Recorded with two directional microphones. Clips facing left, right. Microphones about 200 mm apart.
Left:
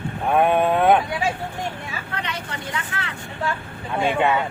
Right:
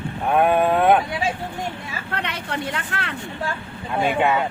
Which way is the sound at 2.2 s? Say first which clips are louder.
Right 3 dB; 60° right (ahead or behind).